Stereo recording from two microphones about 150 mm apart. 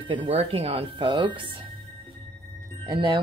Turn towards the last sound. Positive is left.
turn(degrees=-30)  # may be behind; listen again after turning